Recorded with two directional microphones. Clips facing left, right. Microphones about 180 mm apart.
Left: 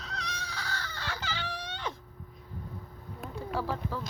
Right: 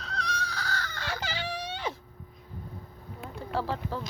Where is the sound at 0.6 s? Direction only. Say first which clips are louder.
Right 4 dB; 30° left (ahead or behind).